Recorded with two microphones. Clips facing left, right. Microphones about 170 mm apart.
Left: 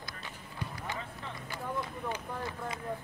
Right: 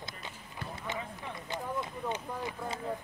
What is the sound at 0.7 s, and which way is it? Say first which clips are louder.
Vehicle: right 5 dB; 20° right (ahead or behind).